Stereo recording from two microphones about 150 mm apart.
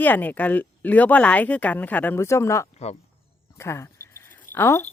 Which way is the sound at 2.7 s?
45° left (ahead or behind).